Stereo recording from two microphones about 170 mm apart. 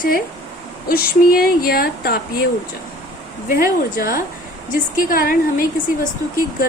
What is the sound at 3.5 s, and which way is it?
A woman's voice, 60° left (ahead or behind).